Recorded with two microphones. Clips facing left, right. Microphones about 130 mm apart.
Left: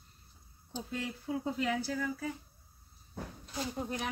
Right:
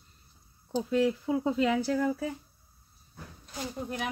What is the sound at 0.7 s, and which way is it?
Speech, 90° right.